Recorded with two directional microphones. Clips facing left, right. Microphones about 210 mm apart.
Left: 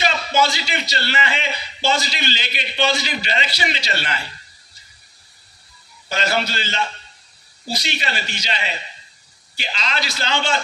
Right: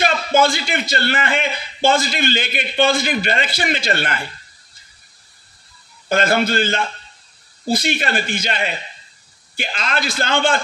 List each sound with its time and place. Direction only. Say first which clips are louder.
0.0 s a man's voice: right 4 dB; 50° right (ahead or behind)
6.0 s a man's voice: right 6 dB; 50° right (ahead or behind)